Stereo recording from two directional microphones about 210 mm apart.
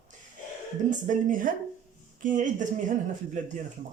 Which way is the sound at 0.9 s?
35° right (ahead or behind).